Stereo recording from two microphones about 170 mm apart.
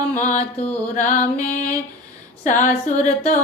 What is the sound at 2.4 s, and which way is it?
Speech, 50° left (ahead or behind).